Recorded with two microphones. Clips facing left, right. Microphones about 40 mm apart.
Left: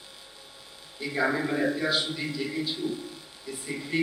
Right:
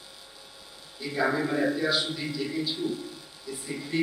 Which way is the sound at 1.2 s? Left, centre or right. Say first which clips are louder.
Right 1 dB; centre.